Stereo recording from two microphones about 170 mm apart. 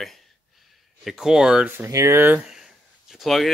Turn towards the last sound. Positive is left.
turn(degrees=0)  # may be behind; listen again after turning